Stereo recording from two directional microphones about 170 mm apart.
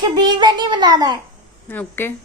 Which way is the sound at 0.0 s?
25° right (ahead or behind).